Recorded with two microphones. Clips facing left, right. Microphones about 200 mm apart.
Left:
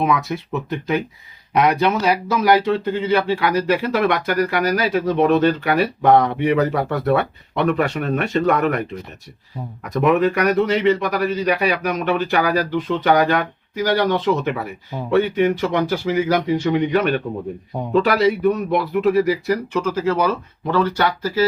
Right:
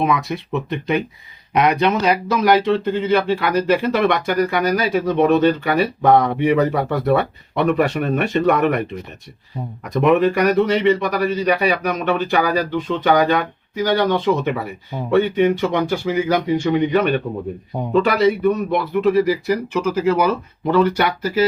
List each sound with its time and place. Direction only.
0.0 s speech: centre (ahead or behind)
9.8 s speech: centre (ahead or behind); by 21.4 s 20° right (ahead or behind)